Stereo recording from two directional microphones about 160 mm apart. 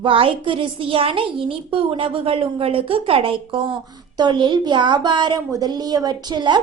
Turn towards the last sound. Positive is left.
turn(degrees=-30)  # may be behind; listen again after turning